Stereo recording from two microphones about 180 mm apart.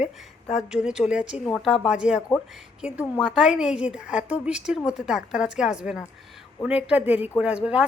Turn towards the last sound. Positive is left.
turn(degrees=-5)  # may be behind; listen again after turning